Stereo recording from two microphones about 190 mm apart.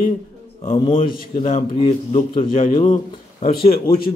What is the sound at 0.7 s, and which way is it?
Speech, 30° left (ahead or behind).